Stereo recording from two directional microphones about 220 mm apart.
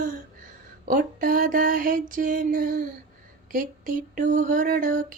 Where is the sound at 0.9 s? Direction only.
35° right (ahead or behind).